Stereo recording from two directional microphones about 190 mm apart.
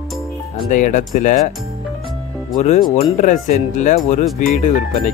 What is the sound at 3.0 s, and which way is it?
Speech, 40° left (ahead or behind).